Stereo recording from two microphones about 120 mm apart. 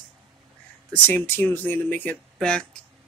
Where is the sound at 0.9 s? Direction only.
15° left (ahead or behind).